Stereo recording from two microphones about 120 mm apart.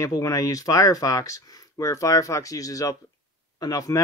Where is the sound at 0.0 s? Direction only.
30° left (ahead or behind).